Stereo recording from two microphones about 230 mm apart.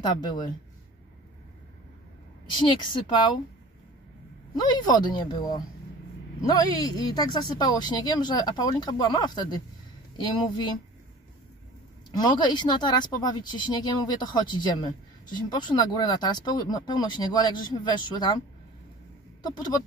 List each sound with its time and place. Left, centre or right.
0.0 s speech: centre
2.5 s speech: centre
4.6 s speech: centre
12.2 s speech: centre
19.4 s speech: centre